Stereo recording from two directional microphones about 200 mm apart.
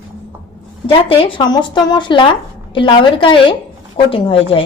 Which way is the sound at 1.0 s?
25° left (ahead or behind).